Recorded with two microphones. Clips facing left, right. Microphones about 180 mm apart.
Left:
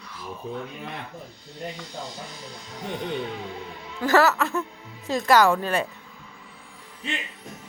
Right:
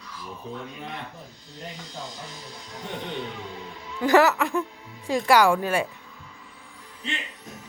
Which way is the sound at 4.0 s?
15° right (ahead or behind).